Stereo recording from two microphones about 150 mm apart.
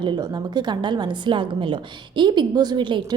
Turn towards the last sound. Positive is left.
turn(degrees=-30)  # may be behind; listen again after turning